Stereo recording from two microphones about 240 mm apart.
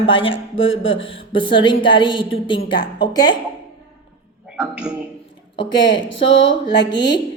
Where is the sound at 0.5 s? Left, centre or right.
Left.